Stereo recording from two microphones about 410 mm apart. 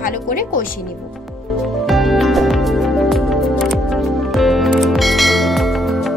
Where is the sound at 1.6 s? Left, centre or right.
Centre.